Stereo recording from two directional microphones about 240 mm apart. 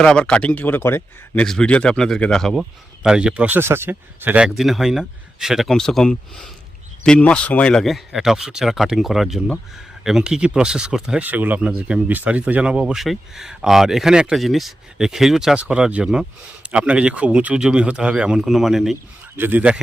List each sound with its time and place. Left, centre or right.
0.0 s a man's voice: centre